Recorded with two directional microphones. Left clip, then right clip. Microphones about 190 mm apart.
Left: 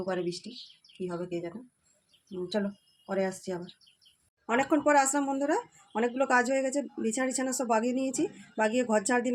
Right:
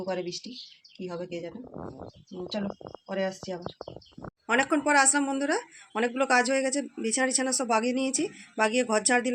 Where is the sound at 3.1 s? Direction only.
15° left (ahead or behind).